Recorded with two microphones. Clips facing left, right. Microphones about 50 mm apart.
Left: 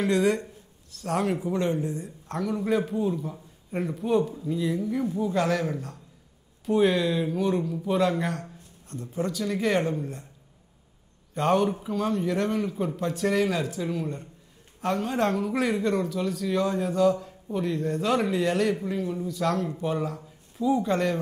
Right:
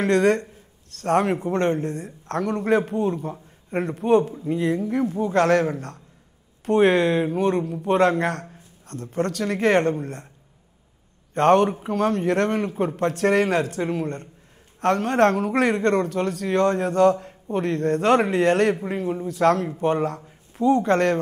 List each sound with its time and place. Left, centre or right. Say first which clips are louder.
0.0 s a man's voice: right 5 dB; right
11.3 s a man's voice: right 6 dB; right
13.7 s a man's voice: right 5 dB; right
14.8 s speech: right 7 dB; right
18.9 s a man's voice: right 3 dB; right
19.3 s a man's voice: right 9 dB; right